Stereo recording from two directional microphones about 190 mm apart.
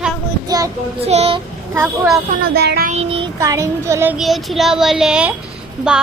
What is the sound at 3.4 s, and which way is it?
Speech, 15° right (ahead or behind).